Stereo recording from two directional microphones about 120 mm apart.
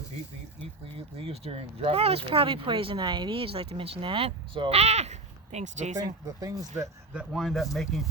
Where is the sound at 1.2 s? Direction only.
55° right (ahead or behind).